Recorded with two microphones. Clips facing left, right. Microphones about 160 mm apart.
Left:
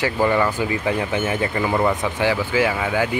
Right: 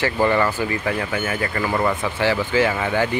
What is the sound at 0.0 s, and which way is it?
Speech, 10° left (ahead or behind).